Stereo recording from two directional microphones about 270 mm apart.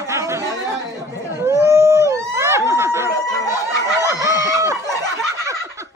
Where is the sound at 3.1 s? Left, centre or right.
Centre.